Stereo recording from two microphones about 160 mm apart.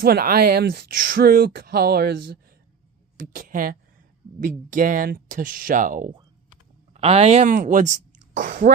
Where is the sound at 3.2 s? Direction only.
60° right (ahead or behind).